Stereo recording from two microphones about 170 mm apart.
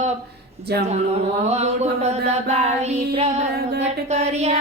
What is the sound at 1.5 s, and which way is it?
Music, 40° right (ahead or behind).